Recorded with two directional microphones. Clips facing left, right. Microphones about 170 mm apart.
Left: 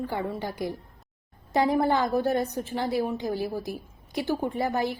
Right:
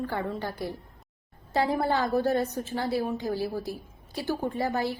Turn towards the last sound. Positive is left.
turn(degrees=15)  # may be behind; listen again after turning